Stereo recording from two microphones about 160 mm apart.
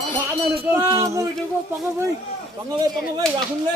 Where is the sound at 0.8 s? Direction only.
20° right (ahead or behind).